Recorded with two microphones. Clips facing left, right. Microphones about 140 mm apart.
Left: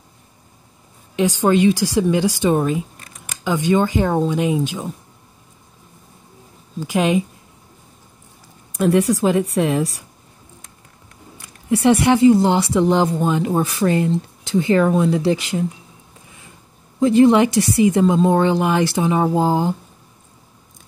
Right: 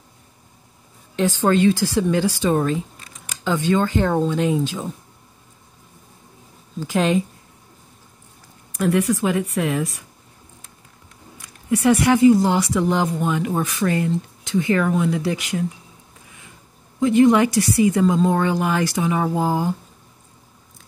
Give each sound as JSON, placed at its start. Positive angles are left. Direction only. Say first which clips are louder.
{"t": 1.1, "sound": "speech", "louder": "left 2 dB", "side_deg": 15}
{"t": 6.8, "sound": "speech", "louder": "left 1 dB", "side_deg": 15}
{"t": 8.7, "sound": "speech", "louder": "left 3 dB", "side_deg": 25}
{"t": 11.7, "sound": "speech", "louder": "left 2 dB", "side_deg": 25}
{"t": 17.0, "sound": "speech", "louder": "left 2 dB", "side_deg": 30}